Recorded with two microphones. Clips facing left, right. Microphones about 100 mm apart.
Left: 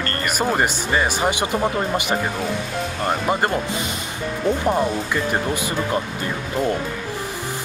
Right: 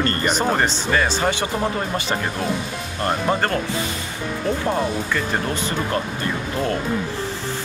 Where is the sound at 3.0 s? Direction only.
15° left (ahead or behind).